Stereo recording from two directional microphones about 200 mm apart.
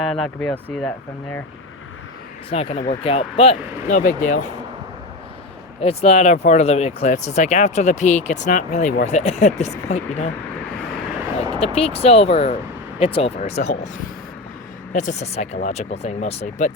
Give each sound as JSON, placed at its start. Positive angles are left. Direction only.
{"t": 0.0, "sound": "speech", "side_deg": 0}
{"t": 2.5, "sound": "speech", "side_deg": 30}
{"t": 5.8, "sound": "speech", "side_deg": 30}
{"t": 11.6, "sound": "speech", "side_deg": 30}
{"t": 14.9, "sound": "speech", "side_deg": 35}